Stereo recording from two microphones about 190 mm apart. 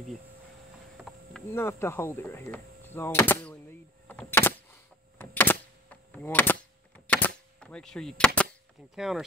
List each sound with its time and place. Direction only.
0.9 s insect: centre (ahead or behind)
1.5 s speech: 10° left (ahead or behind)
4.1 s power windows: 10° left (ahead or behind)
7.1 s gunshot: 10° left (ahead or behind)
8.9 s speech: 5° right (ahead or behind)